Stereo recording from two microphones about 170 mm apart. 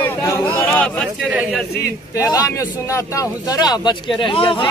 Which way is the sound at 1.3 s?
10° right (ahead or behind).